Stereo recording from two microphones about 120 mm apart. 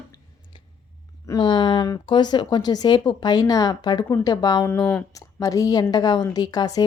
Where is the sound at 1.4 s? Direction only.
40° left (ahead or behind).